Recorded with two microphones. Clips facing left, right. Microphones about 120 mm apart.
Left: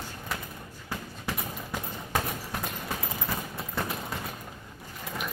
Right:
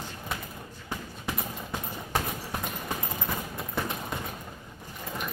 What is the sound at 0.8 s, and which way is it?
Clip-clop, 15° right (ahead or behind).